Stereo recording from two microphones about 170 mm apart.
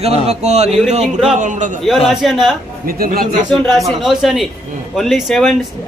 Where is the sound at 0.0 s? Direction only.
40° right (ahead or behind).